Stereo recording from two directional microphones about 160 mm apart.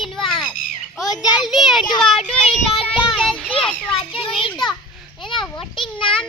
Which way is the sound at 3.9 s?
35° left (ahead or behind).